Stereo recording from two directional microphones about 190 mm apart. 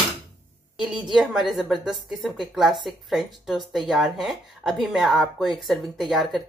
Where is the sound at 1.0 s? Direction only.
Centre (ahead or behind).